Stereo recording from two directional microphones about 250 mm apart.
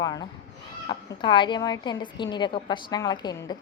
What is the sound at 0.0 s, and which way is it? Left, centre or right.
A woman's voice, centre.